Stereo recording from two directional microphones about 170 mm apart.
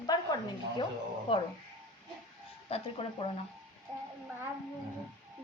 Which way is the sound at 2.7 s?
30° left (ahead or behind).